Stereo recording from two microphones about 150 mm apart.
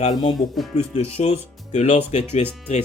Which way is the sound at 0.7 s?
45° left (ahead or behind).